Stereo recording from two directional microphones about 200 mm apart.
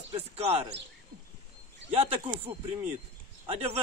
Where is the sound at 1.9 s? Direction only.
30° right (ahead or behind).